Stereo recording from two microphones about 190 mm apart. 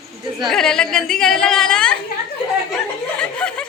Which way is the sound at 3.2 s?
5° left (ahead or behind).